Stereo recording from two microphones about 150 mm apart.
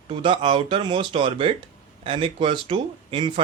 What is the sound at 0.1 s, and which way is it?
A man's voice, 35° right (ahead or behind).